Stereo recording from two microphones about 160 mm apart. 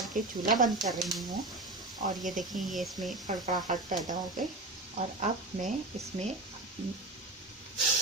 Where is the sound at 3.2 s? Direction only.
50° right (ahead or behind).